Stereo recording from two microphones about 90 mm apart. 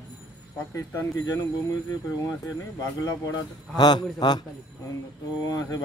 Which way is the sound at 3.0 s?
40° left (ahead or behind).